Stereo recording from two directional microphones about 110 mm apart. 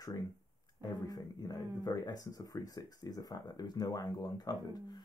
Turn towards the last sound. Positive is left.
turn(degrees=35)  # may be behind; listen again after turning